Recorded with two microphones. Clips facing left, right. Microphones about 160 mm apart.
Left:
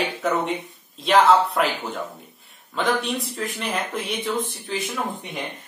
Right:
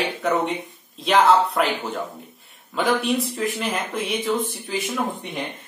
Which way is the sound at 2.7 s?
Centre (ahead or behind).